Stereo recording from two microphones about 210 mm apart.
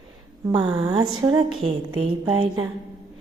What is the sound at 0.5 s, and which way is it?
Mantra, 20° right (ahead or behind).